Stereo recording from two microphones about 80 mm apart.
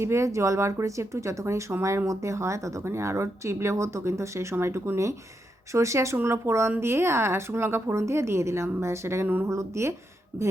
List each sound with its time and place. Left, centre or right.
0.0 s speech: right
9.2 s speech: right
9.5 s speech: right